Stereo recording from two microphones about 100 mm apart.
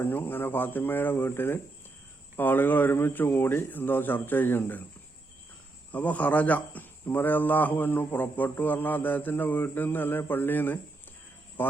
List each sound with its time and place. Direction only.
0.0 s a man's voice: 20° left (ahead or behind)
5.9 s a man's voice: 15° left (ahead or behind)